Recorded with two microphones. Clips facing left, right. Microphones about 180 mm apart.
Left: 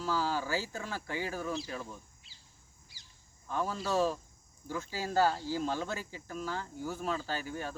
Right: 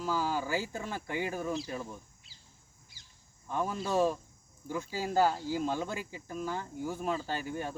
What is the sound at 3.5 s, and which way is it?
Speech, 15° right (ahead or behind).